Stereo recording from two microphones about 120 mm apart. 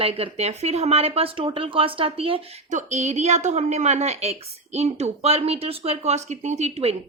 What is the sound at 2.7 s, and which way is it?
A woman's voice, 75° right (ahead or behind).